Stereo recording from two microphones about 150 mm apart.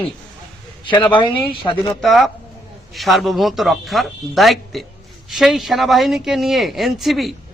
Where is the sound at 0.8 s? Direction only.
30° left (ahead or behind).